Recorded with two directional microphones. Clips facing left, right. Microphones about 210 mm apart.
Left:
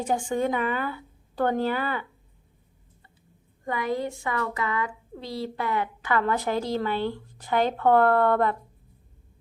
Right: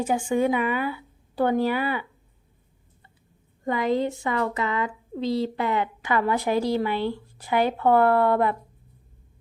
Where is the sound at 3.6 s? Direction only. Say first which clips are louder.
Right 4 dB; 25° right (ahead or behind); by 8.6 s 10° right (ahead or behind).